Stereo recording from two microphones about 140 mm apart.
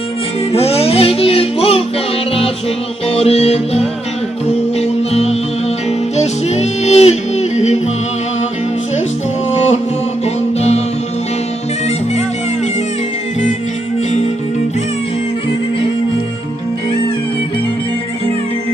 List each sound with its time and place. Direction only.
0.5 s music: 45° left (ahead or behind)
3.1 s music: 45° left (ahead or behind)
9.5 s music: 50° left (ahead or behind)